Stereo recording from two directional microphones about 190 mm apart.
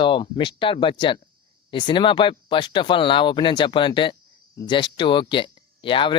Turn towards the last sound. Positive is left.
turn(degrees=25)  # may be behind; listen again after turning